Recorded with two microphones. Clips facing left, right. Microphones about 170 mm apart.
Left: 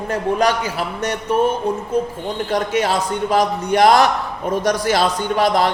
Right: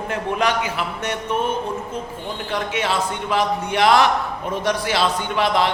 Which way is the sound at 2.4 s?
40° left (ahead or behind).